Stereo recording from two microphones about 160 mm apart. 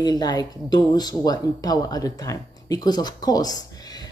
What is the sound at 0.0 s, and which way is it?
Speech, 25° left (ahead or behind).